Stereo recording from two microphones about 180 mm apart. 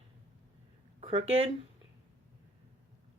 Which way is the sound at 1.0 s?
35° right (ahead or behind).